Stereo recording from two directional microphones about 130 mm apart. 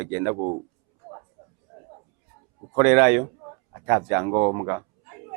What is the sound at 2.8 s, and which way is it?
Speech, 15° right (ahead or behind).